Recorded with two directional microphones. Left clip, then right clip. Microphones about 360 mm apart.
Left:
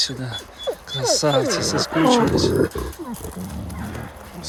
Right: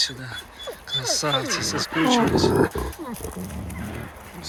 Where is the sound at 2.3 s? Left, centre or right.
Centre.